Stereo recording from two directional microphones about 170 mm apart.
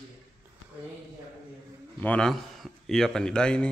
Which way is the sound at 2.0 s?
5° left (ahead or behind).